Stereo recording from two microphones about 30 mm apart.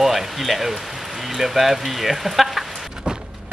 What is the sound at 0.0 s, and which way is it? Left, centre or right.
Speech, centre.